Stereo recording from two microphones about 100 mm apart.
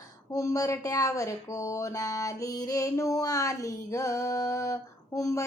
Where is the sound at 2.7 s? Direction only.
35° left (ahead or behind).